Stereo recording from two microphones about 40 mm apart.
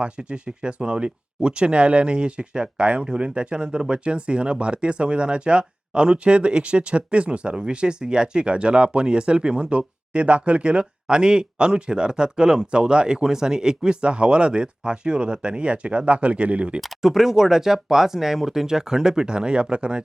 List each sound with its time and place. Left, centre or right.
0.0 s speech: right
17.0 s speech: centre